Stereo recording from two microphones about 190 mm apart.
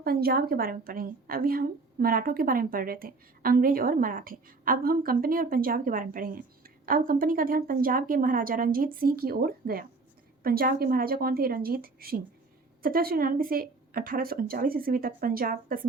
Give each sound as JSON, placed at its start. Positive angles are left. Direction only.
{"t": 0.0, "sound": "a woman's voice", "side_deg": -55}